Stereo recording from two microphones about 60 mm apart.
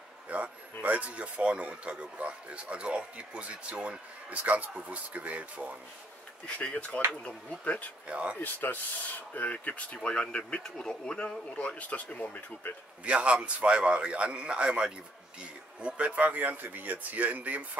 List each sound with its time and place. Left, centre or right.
0.3 s speech: right
6.4 s speech: left
8.1 s speech: centre
8.4 s speech: left
13.0 s speech: centre